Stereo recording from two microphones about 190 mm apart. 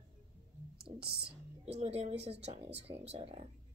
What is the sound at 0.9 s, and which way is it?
Speech, 60° right (ahead or behind).